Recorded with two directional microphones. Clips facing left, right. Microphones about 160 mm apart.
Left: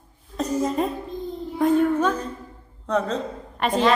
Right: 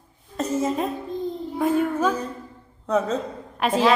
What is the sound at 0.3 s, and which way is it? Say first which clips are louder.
A woman's voice: left 1 dB; 5° right (ahead or behind).